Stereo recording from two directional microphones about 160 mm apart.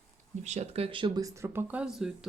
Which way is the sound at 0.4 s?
45° right (ahead or behind).